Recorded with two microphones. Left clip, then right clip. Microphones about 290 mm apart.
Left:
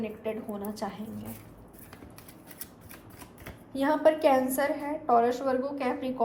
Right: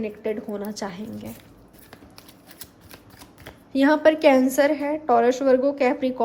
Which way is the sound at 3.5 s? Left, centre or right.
Right.